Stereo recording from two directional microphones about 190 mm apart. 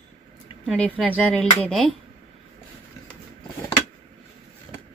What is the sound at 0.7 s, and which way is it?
Speech, 5° left (ahead or behind).